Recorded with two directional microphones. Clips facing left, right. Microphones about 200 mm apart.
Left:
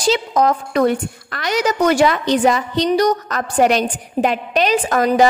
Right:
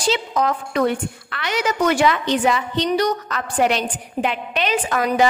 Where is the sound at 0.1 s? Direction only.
40° left (ahead or behind).